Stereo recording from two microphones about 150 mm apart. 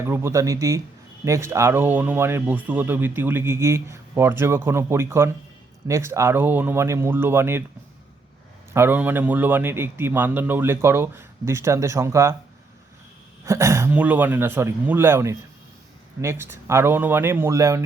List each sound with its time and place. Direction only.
0.0 s speech: 15° right (ahead or behind)
8.7 s speech: 15° right (ahead or behind)
13.4 s speech: 20° right (ahead or behind)